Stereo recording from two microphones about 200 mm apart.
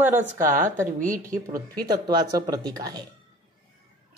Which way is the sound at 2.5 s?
20° right (ahead or behind).